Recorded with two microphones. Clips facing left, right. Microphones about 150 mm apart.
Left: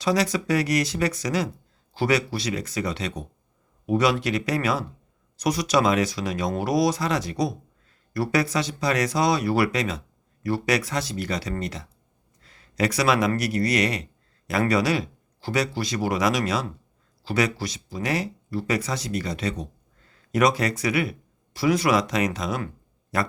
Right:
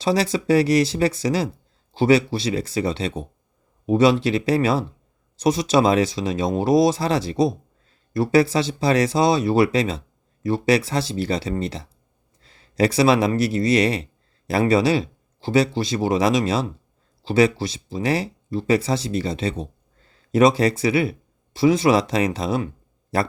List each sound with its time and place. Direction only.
0.0 s speech: 30° right (ahead or behind)